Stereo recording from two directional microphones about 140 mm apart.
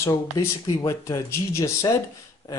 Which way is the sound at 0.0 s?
20° left (ahead or behind).